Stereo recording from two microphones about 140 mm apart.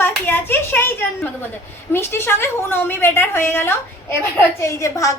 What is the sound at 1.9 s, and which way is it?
A woman's voice, 15° left (ahead or behind).